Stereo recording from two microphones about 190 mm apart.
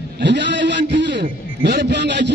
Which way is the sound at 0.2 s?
65° right (ahead or behind).